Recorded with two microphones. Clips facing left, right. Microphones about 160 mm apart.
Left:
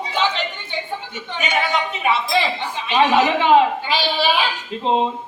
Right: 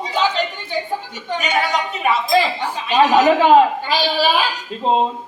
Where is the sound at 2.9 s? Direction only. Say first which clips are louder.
Right 3 dB; 40° right (ahead or behind).